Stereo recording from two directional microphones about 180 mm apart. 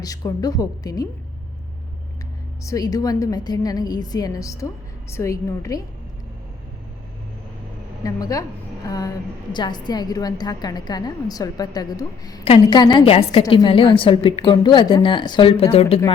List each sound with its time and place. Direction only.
0.0 s a woman's voice: 20° left (ahead or behind)
2.6 s a woman's voice: 20° left (ahead or behind)
8.0 s a woman's voice: 20° left (ahead or behind)